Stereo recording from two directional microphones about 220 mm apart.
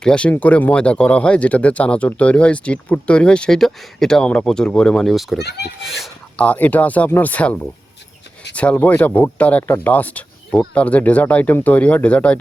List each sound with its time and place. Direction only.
0.0 s speech: 5° left (ahead or behind)
5.4 s speech: 50° left (ahead or behind)
5.8 s speech: centre (ahead or behind)